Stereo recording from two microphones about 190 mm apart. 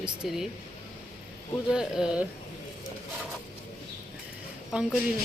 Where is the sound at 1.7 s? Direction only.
5° right (ahead or behind).